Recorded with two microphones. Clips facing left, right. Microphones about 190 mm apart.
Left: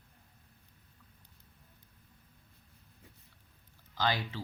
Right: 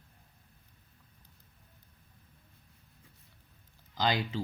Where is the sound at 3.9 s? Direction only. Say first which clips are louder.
Right 3 dB; 15° right (ahead or behind).